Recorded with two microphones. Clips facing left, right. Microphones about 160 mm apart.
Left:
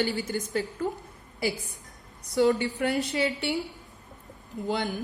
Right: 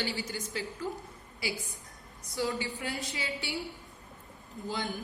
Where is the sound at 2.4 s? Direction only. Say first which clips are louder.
Left 10 dB; 70° left (ahead or behind).